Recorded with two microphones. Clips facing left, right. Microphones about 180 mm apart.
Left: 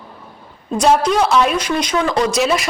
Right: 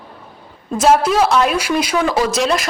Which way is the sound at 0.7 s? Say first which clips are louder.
Right 1 dB; 5° right (ahead or behind).